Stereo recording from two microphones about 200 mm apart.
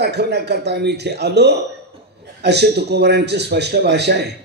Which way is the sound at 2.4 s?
55° right (ahead or behind).